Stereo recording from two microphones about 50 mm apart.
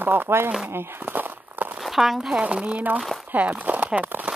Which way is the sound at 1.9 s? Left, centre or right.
Centre.